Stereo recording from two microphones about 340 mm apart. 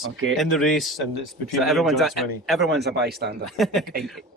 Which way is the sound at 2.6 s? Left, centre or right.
Right.